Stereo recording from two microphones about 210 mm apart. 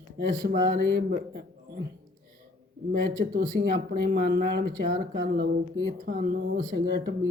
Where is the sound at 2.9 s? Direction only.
45° right (ahead or behind).